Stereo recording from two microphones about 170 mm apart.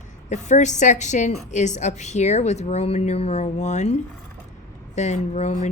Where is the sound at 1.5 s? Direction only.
45° left (ahead or behind).